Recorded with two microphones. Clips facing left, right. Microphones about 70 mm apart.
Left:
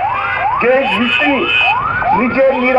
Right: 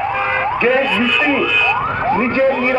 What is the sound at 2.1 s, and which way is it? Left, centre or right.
Speech, left.